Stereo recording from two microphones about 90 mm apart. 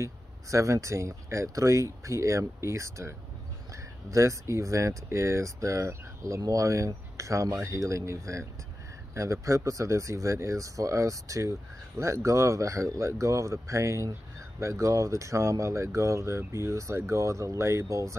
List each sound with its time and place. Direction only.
0.0 s speech: 35° right (ahead or behind)